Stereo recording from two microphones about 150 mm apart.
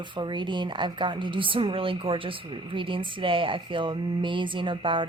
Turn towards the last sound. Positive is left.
turn(degrees=-35)  # may be behind; listen again after turning